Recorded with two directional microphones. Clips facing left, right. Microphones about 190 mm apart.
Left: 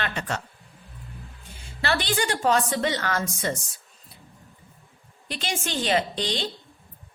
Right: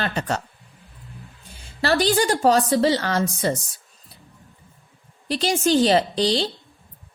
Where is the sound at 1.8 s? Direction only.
40° right (ahead or behind).